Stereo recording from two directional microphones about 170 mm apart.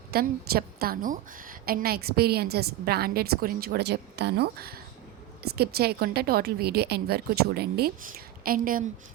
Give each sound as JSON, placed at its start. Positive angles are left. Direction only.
{"t": 0.1, "sound": "a woman's voice", "side_deg": -65}